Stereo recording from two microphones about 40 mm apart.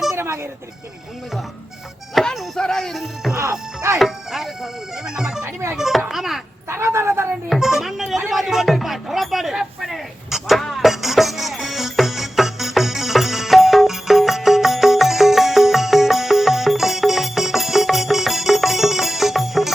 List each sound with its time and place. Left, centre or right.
2.2 s music: centre
2.6 s speech: centre
2.9 s speech: centre
6.7 s speech: right
7.6 s speech: centre
10.6 s music: centre